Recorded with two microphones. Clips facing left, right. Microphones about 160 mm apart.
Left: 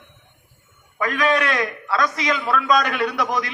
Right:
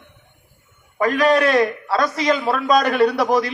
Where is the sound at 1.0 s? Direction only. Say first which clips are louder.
Right 5 dB; 35° right (ahead or behind).